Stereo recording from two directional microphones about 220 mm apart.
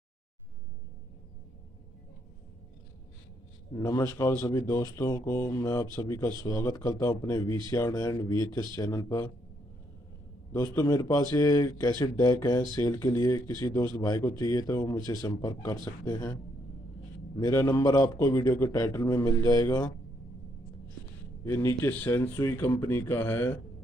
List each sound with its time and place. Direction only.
3.7 s speech: 15° left (ahead or behind)
10.5 s speech: 10° left (ahead or behind)
17.4 s speech: 15° left (ahead or behind)
21.5 s speech: 10° left (ahead or behind)